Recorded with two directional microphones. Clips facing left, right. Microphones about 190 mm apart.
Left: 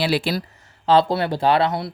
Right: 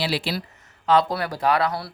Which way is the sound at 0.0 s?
50° left (ahead or behind).